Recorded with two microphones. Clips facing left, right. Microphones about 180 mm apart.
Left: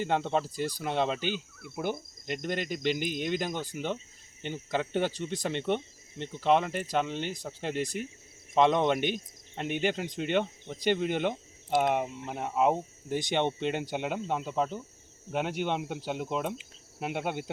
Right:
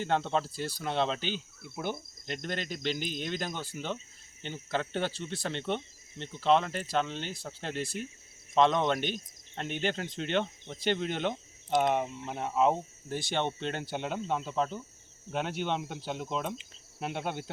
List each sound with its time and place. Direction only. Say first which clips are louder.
0.0 s speech: left 1 dB; 10° left (ahead or behind)